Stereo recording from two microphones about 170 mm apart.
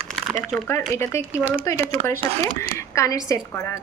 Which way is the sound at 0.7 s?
15° left (ahead or behind).